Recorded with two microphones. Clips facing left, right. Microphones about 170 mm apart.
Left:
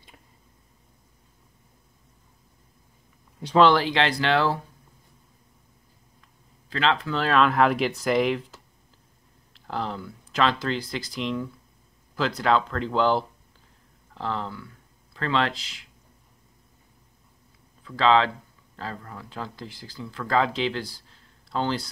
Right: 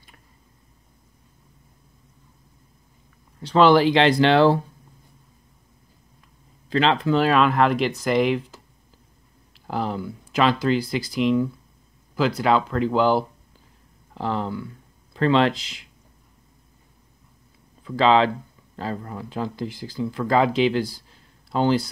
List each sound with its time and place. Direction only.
3.5 s speech: 10° right (ahead or behind)
6.7 s speech: 20° right (ahead or behind)
17.8 s speech: 15° right (ahead or behind)